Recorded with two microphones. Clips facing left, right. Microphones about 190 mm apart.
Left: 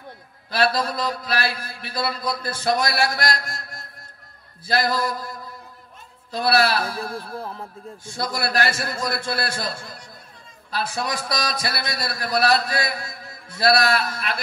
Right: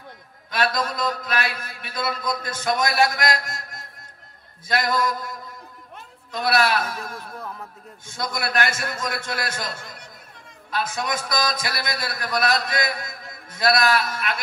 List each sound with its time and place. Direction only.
0.5 s a man's voice: 35° left (ahead or behind)
6.3 s a man's voice: 35° left (ahead or behind)